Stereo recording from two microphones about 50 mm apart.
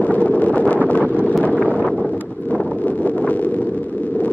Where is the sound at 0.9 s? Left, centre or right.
Left.